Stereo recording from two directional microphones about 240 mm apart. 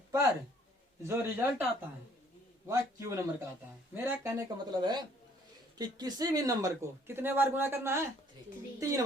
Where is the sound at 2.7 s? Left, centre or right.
Centre.